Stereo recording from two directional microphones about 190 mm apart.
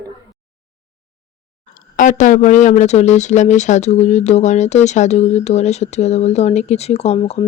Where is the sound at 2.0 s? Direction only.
40° left (ahead or behind).